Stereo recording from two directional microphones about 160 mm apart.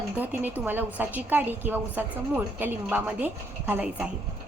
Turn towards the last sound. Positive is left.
turn(degrees=-10)  # may be behind; listen again after turning